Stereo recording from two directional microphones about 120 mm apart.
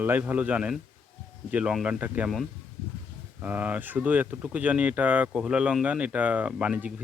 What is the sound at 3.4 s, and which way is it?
Speech, 15° right (ahead or behind).